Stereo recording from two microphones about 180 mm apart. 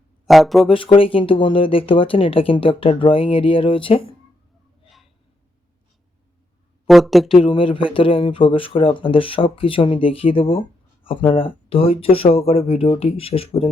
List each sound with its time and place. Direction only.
0.3 s speech: centre (ahead or behind)
0.9 s speech: 30° left (ahead or behind)
6.8 s speech: centre (ahead or behind)
7.3 s speech: 30° left (ahead or behind)